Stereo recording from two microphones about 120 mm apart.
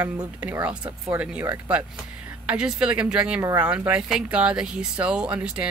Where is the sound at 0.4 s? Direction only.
10° right (ahead or behind).